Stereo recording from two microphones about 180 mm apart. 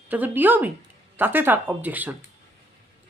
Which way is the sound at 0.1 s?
10° right (ahead or behind).